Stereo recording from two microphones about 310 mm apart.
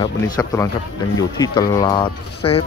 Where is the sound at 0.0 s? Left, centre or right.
Centre.